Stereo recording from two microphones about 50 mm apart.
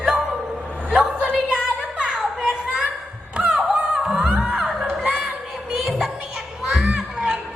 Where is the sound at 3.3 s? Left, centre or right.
Centre.